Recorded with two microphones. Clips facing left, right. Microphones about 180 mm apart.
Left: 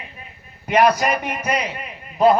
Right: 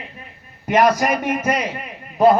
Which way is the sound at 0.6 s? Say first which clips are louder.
Right 1 dB; 45° right (ahead or behind).